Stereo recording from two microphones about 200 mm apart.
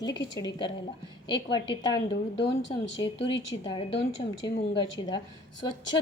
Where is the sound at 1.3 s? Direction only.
25° left (ahead or behind).